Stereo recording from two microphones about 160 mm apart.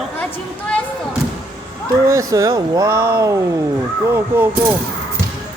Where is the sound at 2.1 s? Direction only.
20° right (ahead or behind).